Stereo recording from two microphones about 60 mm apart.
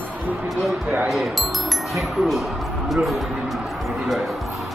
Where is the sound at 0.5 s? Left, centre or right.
Centre.